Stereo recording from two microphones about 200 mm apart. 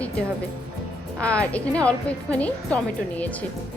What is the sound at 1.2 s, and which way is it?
A woman's voice, 5° left (ahead or behind).